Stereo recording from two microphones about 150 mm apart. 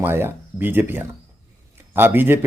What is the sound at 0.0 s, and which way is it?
A man's voice, 15° right (ahead or behind).